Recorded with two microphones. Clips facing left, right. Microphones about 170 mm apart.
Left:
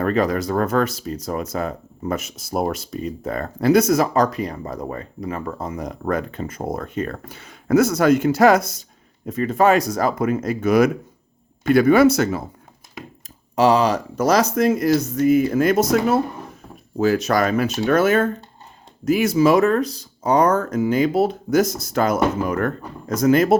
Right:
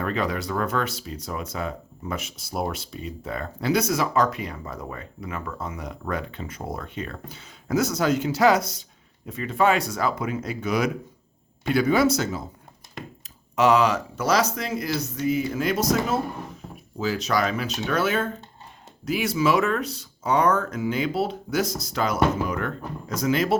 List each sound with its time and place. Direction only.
0.0 s speech: 45° left (ahead or behind); by 12.5 s 60° left (ahead or behind)
13.6 s speech: 35° left (ahead or behind)